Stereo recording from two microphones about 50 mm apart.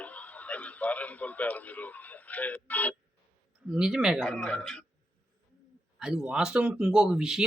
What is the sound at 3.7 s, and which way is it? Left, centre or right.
Speech, centre.